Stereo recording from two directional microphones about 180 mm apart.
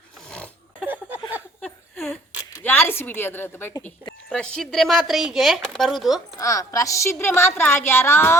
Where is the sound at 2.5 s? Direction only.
10° left (ahead or behind).